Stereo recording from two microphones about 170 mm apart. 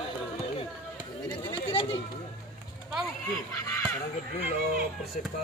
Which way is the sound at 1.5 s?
30° left (ahead or behind).